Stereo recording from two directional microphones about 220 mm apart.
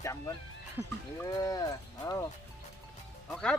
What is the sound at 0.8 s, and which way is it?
Speech, 10° right (ahead or behind).